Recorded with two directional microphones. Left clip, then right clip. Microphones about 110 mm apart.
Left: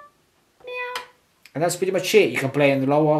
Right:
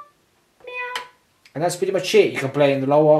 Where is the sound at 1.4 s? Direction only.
50° left (ahead or behind).